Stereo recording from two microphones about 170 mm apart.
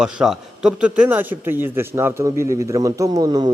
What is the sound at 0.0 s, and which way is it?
Speech, 5° right (ahead or behind).